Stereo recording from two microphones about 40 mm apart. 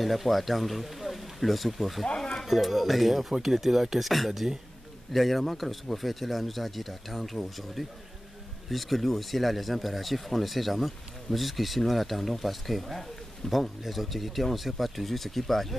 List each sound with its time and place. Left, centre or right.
0.0 s speech: centre
2.0 s music: left
2.4 s speech: centre